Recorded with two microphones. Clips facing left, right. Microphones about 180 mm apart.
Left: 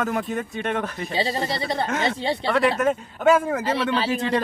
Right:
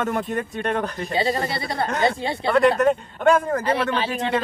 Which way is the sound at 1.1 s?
25° left (ahead or behind).